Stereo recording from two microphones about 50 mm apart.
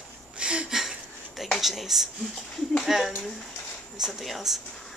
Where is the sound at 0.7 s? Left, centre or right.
Centre.